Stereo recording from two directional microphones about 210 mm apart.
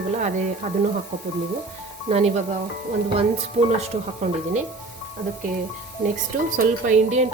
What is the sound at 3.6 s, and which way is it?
Speech, 25° right (ahead or behind).